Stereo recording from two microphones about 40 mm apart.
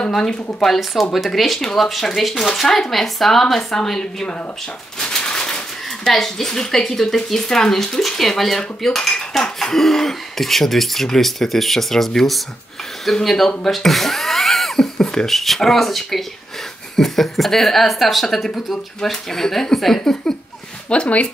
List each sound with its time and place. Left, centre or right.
0.1 s speech: centre
5.0 s bird: centre
6.0 s speech: centre
20.9 s speech: left